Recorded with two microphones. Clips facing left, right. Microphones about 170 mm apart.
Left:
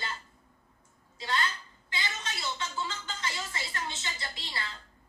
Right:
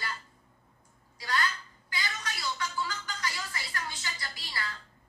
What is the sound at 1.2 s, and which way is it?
A woman's voice, 25° left (ahead or behind).